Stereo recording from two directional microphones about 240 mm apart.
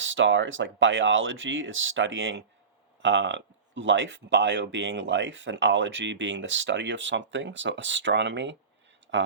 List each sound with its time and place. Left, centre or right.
0.0 s speech: right